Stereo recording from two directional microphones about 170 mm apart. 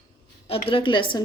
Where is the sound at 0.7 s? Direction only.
30° left (ahead or behind).